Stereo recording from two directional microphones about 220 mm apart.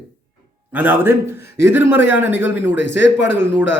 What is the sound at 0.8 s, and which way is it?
A man's voice, 10° right (ahead or behind).